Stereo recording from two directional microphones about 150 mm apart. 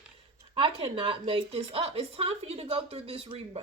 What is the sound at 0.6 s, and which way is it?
Speech, 35° right (ahead or behind).